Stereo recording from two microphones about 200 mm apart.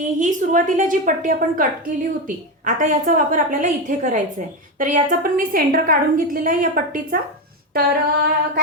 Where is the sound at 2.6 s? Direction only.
40° right (ahead or behind).